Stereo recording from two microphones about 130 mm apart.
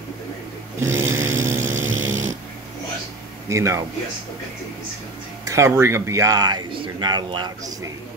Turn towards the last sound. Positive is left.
turn(degrees=-30)  # may be behind; listen again after turning